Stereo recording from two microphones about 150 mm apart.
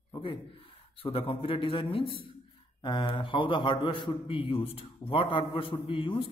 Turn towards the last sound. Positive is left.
turn(degrees=35)  # may be behind; listen again after turning